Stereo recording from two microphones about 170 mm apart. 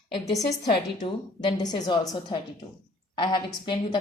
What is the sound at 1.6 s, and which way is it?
Speech, 25° left (ahead or behind).